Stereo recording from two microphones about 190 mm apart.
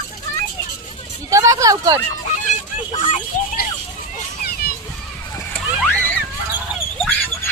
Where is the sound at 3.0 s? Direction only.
40° left (ahead or behind).